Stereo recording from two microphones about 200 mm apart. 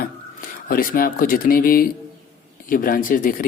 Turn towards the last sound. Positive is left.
turn(degrees=45)  # may be behind; listen again after turning